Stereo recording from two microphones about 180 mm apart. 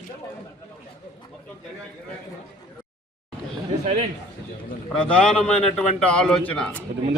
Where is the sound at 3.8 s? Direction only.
35° right (ahead or behind).